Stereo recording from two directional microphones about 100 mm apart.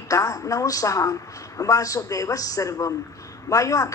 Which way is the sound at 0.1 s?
35° left (ahead or behind).